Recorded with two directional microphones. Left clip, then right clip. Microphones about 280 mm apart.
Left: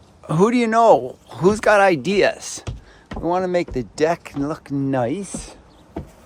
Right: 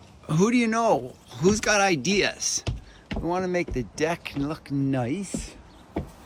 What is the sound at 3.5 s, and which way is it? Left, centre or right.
Speech, centre.